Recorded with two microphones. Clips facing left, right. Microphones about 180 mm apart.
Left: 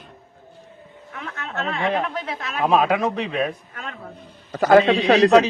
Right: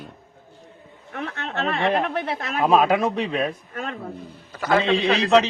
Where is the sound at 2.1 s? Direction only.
60° right (ahead or behind).